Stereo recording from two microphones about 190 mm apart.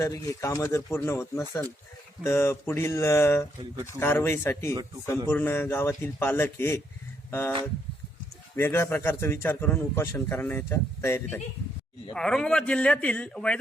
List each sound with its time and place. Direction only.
0.0 s a man's voice: 15° left (ahead or behind)
8.5 s a man's voice: 10° left (ahead or behind)